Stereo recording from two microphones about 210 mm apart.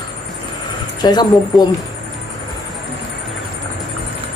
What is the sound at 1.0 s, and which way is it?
Speech, 20° left (ahead or behind).